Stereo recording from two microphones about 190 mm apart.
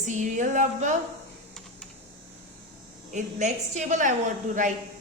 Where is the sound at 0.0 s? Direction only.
40° right (ahead or behind).